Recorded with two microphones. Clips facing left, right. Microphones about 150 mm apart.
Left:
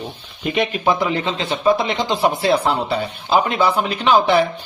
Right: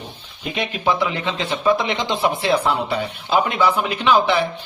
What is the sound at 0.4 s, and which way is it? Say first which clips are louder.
A man's voice: left 3 dB; 50° left (ahead or behind).